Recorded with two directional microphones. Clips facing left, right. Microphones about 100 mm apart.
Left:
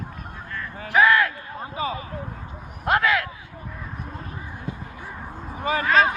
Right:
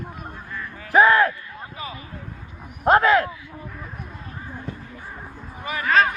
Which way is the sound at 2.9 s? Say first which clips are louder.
Right 5 dB; 35° right (ahead or behind).